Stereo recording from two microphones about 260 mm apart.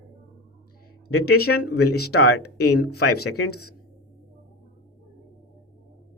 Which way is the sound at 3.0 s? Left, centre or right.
Left.